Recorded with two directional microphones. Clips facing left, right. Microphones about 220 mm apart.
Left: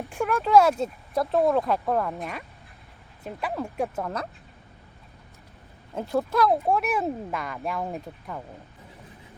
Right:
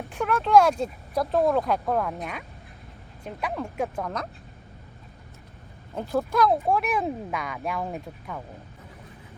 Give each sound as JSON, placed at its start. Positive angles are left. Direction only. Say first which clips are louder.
{"t": 0.0, "sound": "speech", "louder": "left 1 dB", "side_deg": 0}
{"t": 5.9, "sound": "speech", "louder": "even", "side_deg": 0}